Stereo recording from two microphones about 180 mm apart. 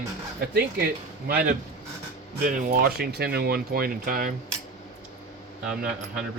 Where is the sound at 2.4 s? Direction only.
50° right (ahead or behind).